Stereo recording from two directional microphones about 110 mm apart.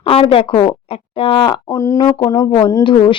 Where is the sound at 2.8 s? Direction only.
50° left (ahead or behind).